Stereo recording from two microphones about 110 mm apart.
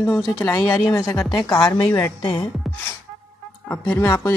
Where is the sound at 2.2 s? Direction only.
45° left (ahead or behind).